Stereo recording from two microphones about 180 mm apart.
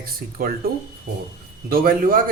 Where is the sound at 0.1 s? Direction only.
55° right (ahead or behind).